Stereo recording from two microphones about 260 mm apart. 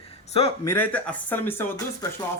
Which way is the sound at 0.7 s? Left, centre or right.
Centre.